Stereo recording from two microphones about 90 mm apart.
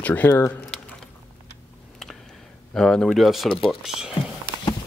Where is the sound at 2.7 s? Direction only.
5° left (ahead or behind).